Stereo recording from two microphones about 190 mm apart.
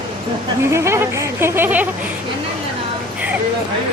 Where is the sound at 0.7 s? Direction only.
15° right (ahead or behind).